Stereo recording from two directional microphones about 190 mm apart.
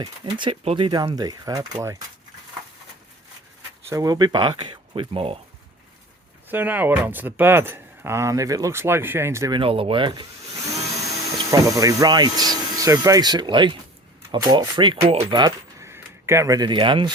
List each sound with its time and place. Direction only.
0.0 s speech: 25° right (ahead or behind)
3.8 s speech: 20° right (ahead or behind)
6.5 s speech: 10° right (ahead or behind); by 10.2 s 25° right (ahead or behind)
11.5 s speech: 15° right (ahead or behind)